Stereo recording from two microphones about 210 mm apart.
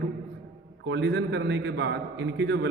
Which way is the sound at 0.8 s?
60° right (ahead or behind).